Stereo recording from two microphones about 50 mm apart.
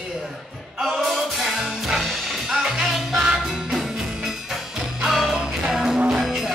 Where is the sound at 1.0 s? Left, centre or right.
Centre.